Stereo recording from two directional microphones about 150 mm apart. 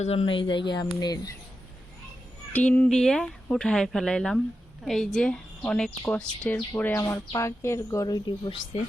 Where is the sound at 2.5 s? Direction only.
10° left (ahead or behind); by 8.5 s 30° left (ahead or behind).